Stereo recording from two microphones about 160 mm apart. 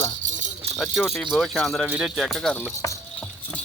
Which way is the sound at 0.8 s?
Centre (ahead or behind).